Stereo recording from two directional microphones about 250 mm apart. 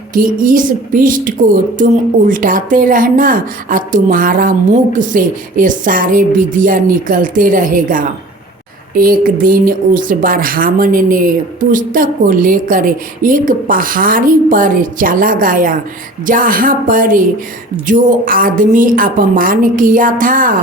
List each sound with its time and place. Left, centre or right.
0.1 s speech: right